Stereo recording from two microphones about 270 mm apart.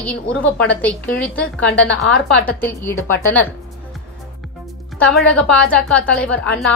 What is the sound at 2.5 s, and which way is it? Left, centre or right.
Speech, centre.